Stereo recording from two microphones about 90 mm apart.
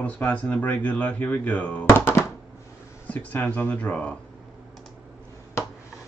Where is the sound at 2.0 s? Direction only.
25° left (ahead or behind).